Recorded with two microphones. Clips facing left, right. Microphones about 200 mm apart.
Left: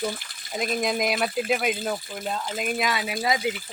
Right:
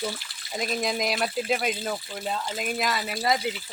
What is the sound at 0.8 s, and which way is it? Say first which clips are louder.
Speech: left 2 dB; centre (ahead or behind).